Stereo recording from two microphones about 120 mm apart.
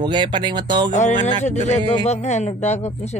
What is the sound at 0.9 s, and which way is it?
Speech, 85° left.